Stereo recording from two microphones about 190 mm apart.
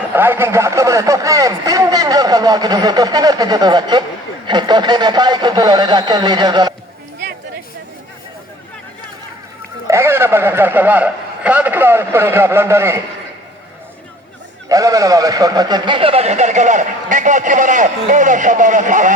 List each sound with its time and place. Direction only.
0.1 s speech: 10° right (ahead or behind)
9.8 s a man's voice: 15° right (ahead or behind)
14.7 s a man's voice: 20° right (ahead or behind); by 19.1 s 40° right (ahead or behind)